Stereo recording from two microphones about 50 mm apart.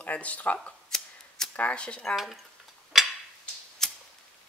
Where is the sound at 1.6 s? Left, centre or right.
Left.